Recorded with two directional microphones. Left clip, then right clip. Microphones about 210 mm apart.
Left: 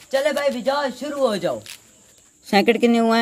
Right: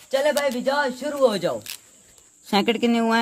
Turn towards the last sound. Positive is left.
turn(degrees=-5)  # may be behind; listen again after turning